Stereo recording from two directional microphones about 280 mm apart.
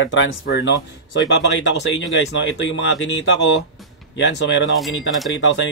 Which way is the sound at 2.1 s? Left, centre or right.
Left.